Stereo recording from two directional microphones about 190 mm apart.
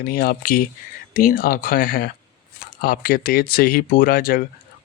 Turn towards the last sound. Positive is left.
turn(degrees=50)  # may be behind; listen again after turning